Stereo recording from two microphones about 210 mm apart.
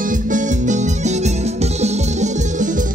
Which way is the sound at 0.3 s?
35° right (ahead or behind).